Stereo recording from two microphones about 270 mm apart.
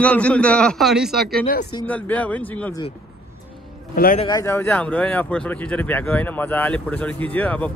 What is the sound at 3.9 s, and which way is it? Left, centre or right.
Speech, left.